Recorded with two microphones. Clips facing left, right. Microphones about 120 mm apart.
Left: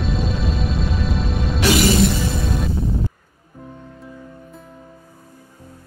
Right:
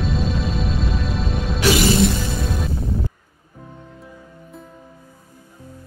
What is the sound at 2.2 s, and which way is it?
Music, centre (ahead or behind).